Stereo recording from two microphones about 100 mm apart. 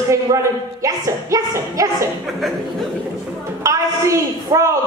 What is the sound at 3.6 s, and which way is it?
A woman's voice, 30° right (ahead or behind).